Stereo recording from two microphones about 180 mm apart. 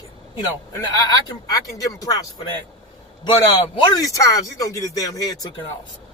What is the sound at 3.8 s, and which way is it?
Speech, 20° left (ahead or behind).